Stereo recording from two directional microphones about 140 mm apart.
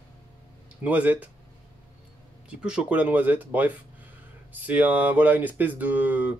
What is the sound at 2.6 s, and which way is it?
Speech, 5° right (ahead or behind).